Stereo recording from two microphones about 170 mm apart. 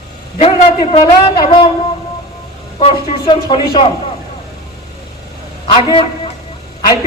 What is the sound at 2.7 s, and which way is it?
A man's voice, 30° left (ahead or behind).